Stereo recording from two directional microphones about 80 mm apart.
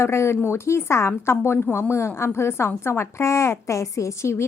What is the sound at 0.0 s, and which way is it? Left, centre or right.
A woman's voice, left.